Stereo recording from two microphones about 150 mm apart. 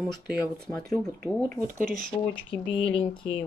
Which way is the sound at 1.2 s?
10° left (ahead or behind).